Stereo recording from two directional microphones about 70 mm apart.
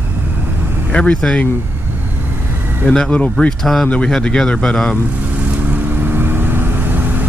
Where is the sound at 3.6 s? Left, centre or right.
Centre.